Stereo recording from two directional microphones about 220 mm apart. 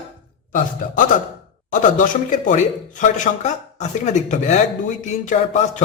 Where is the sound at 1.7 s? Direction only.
35° left (ahead or behind).